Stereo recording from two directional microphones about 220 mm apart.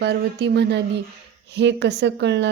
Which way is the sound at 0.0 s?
50° right (ahead or behind).